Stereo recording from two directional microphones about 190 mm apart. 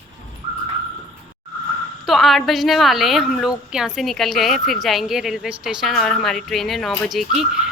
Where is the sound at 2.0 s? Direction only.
Centre (ahead or behind).